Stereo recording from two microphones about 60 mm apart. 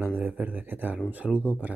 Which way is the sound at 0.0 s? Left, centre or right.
Right.